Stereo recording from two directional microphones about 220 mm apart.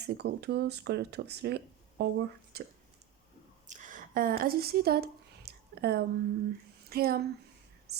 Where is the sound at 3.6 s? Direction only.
35° right (ahead or behind).